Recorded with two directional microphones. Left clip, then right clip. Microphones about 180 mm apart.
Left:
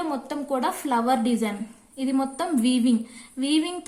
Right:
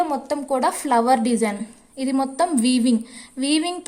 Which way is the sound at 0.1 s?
30° right (ahead or behind).